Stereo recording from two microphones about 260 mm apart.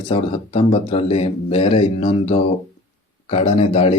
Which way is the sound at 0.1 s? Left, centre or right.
Left.